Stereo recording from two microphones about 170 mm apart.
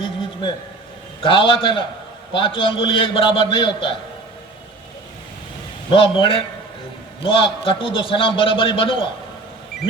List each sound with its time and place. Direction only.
1.2 s a man's voice: 30° left (ahead or behind)
5.9 s a man's voice: 30° left (ahead or behind)